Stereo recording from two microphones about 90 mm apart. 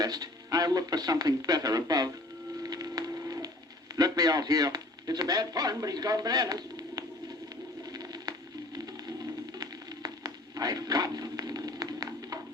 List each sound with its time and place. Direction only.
0.0 s a man's voice: 45° right (ahead or behind)
2.6 s music: 45° right (ahead or behind)
3.9 s a man's voice: 45° right (ahead or behind)
7.5 s patter: 50° right (ahead or behind)
8.9 s music: 45° right (ahead or behind)